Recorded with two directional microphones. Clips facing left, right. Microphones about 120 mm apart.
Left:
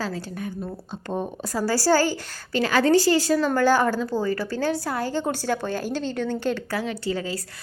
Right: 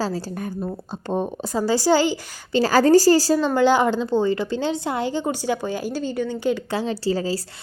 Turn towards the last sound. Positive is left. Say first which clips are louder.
# right 5 dB
turn(degrees=-30)  # may be behind; listen again after turning